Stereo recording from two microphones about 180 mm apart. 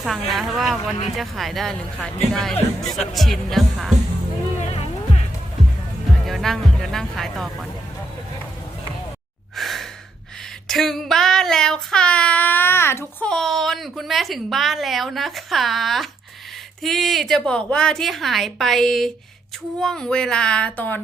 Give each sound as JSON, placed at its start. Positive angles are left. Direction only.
{"t": 0.0, "sound": "child singing", "side_deg": 0}
{"t": 4.7, "sound": "music", "side_deg": 35}
{"t": 6.2, "sound": "child singing", "side_deg": 0}
{"t": 9.6, "sound": "sigh", "side_deg": 0}
{"t": 10.7, "sound": "child singing", "side_deg": 0}